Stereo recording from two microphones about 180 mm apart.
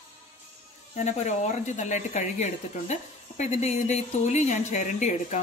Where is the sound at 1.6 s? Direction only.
40° left (ahead or behind).